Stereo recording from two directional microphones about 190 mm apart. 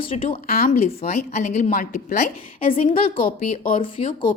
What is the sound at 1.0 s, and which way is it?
A woman's voice, 35° left (ahead or behind).